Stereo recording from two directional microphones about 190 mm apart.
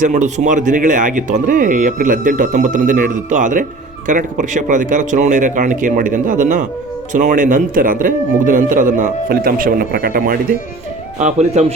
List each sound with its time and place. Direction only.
0.0 s speech: 40° right (ahead or behind)
11.2 s speech: 35° right (ahead or behind)